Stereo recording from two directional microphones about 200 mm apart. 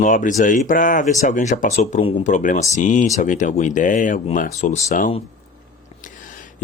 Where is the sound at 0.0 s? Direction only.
40° left (ahead or behind).